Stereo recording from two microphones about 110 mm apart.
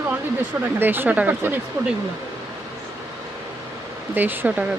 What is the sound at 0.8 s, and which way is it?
Speech, 20° right (ahead or behind).